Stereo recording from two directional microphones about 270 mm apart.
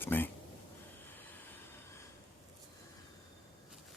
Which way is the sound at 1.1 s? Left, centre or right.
Centre.